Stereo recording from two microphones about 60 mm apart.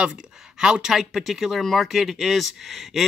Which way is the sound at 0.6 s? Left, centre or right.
Centre.